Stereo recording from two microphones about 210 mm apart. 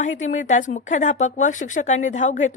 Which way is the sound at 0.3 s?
35° left (ahead or behind).